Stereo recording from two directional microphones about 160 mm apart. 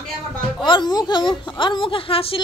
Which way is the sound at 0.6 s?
30° left (ahead or behind).